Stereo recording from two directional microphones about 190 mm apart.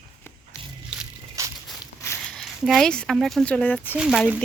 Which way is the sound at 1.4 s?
15° right (ahead or behind).